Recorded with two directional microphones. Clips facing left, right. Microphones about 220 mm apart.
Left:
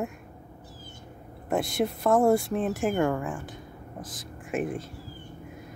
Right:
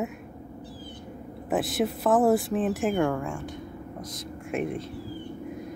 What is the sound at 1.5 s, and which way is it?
Speech, centre (ahead or behind).